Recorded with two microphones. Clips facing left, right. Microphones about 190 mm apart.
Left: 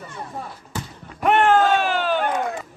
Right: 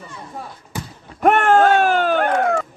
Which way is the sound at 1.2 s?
45° right (ahead or behind).